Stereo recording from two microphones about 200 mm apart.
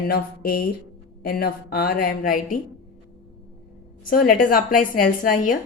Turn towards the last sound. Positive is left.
turn(degrees=45)  # may be behind; listen again after turning